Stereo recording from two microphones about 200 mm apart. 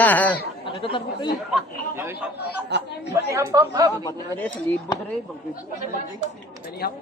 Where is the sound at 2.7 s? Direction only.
60° right (ahead or behind).